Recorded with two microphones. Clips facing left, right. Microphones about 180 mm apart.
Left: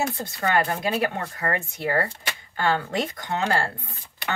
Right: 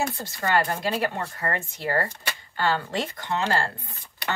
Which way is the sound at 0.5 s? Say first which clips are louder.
Left 1 dB; 55° left (ahead or behind).